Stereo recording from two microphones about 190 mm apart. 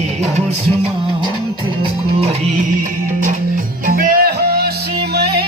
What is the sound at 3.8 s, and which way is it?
Music, 50° right (ahead or behind).